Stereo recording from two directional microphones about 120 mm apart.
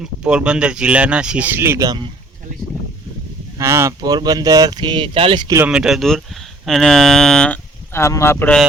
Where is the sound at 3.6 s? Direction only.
20° right (ahead or behind).